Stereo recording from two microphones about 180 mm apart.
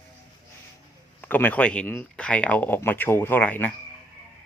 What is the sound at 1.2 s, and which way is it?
Speech, 10° left (ahead or behind).